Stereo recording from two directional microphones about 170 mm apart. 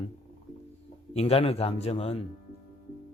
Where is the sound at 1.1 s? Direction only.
35° left (ahead or behind).